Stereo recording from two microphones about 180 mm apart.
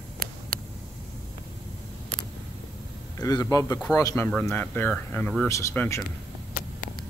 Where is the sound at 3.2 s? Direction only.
20° left (ahead or behind).